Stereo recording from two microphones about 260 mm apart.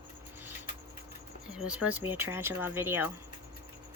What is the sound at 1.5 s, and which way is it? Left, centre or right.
Speech, centre.